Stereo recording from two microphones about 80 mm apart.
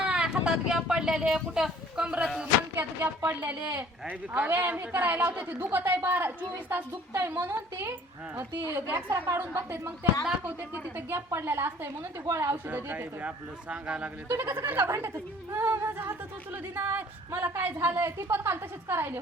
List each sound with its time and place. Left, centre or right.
0.0 s a woman's voice: centre; by 10.1 s right
11.3 s a woman's voice: right
12.6 s a woman's voice: right
14.3 s a woman's voice: right
15.9 s a woman's voice: right